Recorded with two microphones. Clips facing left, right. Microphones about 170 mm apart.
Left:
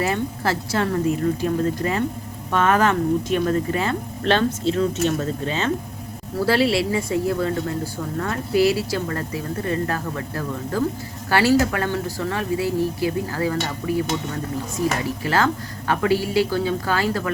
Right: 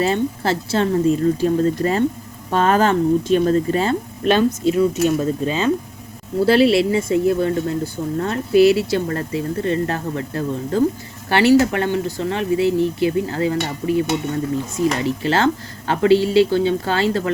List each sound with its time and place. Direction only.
0.0 s speech: 25° right (ahead or behind)
4.2 s speech: 15° right (ahead or behind)
15.0 s speech: 25° right (ahead or behind)